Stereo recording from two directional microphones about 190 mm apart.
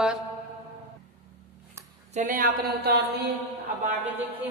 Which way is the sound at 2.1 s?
45° right (ahead or behind).